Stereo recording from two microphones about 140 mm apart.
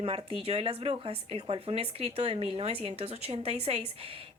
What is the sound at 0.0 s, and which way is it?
Speech, 40° right (ahead or behind).